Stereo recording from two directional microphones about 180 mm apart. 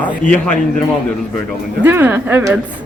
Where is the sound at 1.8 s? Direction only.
10° right (ahead or behind).